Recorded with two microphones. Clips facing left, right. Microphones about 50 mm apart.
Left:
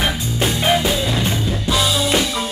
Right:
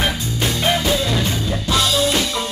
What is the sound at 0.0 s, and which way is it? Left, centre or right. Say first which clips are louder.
Music: left 1 dB; centre.